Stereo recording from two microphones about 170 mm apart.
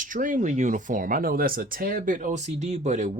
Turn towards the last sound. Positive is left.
turn(degrees=-45)  # may be behind; listen again after turning